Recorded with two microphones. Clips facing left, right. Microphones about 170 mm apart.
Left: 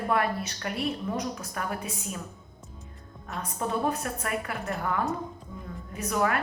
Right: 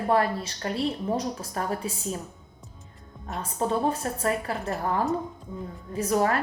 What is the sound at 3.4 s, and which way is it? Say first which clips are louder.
A woman's voice: right 3 dB; 30° right (ahead or behind).